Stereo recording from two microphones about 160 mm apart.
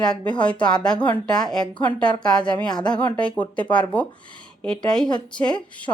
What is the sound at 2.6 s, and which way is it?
Speech, 25° left (ahead or behind).